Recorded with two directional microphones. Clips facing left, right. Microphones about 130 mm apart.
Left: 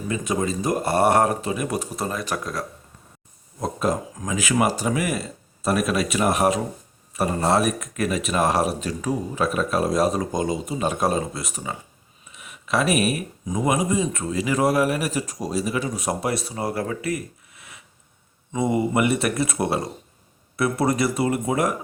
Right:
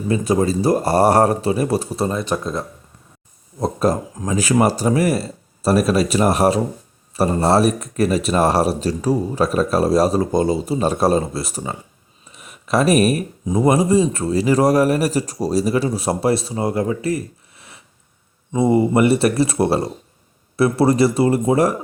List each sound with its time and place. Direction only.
0.1 s speech: 35° right (ahead or behind)